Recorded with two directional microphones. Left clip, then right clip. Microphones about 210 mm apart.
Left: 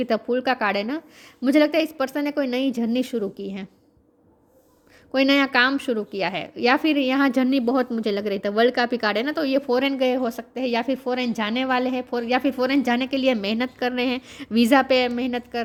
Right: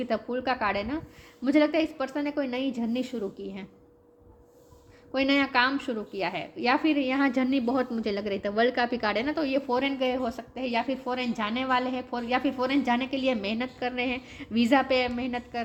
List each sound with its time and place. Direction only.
0.0 s a woman's voice: 50° left (ahead or behind)
5.1 s a woman's voice: 50° left (ahead or behind)